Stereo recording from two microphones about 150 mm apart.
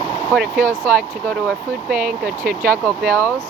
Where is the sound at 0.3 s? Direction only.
70° right (ahead or behind).